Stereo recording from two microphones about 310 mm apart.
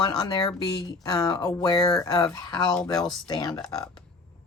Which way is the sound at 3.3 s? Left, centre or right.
Centre.